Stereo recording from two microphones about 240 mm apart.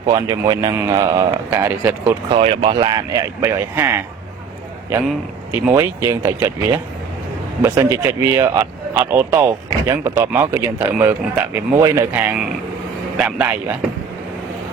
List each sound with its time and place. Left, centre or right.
0.0 s speech: centre
2.3 s speech: right
5.0 s a man's voice: centre